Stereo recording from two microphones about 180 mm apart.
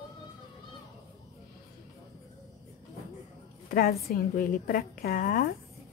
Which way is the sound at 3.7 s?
55° left (ahead or behind).